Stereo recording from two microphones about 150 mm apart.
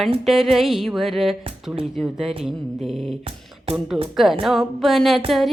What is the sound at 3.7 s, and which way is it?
Speech, 40° right (ahead or behind).